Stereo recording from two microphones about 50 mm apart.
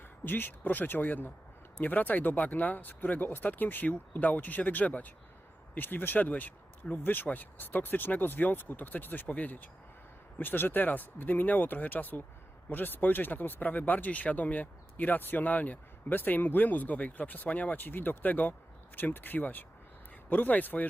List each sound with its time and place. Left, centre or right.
0.3 s speech: left